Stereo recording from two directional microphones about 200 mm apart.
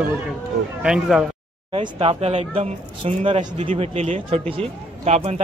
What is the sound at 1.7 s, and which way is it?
Speech, 25° right (ahead or behind).